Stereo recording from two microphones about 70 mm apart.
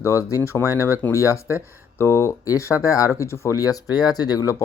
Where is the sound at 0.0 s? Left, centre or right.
Left.